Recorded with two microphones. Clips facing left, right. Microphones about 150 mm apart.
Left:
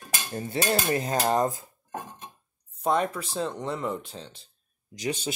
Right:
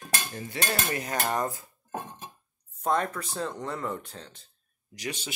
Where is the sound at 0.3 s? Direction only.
35° left (ahead or behind).